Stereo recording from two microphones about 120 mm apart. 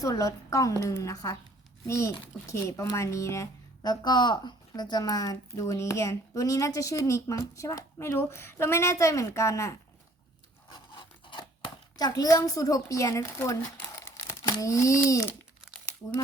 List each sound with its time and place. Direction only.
0.0 s speech: 25° left (ahead or behind)
10.7 s scissors: 40° left (ahead or behind); by 14.3 s 20° left (ahead or behind)
14.4 s speech: 30° left (ahead or behind)